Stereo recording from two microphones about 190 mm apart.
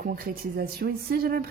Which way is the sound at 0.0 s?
50° right (ahead or behind).